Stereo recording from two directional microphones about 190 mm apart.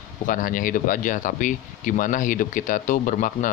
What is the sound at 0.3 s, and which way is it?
Speech, 45° left (ahead or behind).